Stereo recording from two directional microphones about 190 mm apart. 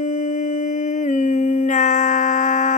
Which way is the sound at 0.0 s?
40° left (ahead or behind).